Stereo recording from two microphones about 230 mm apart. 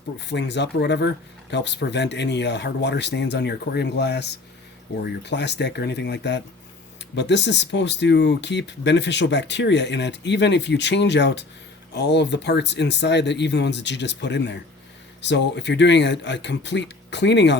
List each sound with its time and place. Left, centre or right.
0.3 s speech: left